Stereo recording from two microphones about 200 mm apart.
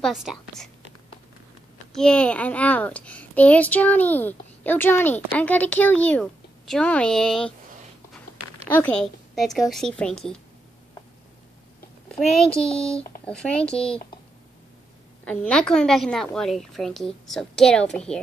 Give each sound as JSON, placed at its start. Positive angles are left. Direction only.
{"t": 0.0, "sound": "a woman's voice", "side_deg": 0}
{"t": 2.0, "sound": "a child's voice", "side_deg": 5}
{"t": 8.6, "sound": "a woman's voice", "side_deg": 10}
{"t": 12.1, "sound": "a woman's voice", "side_deg": 5}
{"t": 15.2, "sound": "a woman's voice", "side_deg": 5}